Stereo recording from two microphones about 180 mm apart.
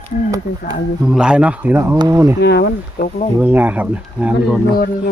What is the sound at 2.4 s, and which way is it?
Speech, 65° left (ahead or behind).